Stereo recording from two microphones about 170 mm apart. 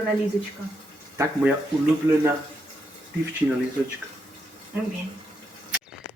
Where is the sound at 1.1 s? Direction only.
15° right (ahead or behind).